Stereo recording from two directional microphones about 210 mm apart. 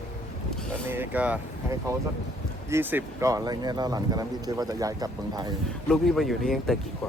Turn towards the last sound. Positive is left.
turn(degrees=0)  # may be behind; listen again after turning